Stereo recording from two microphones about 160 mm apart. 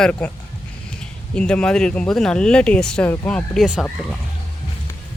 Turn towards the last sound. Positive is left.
turn(degrees=0)  # may be behind; listen again after turning